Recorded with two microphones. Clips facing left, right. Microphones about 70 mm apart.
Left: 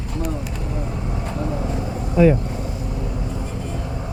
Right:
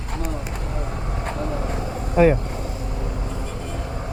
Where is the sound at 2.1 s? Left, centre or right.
Right.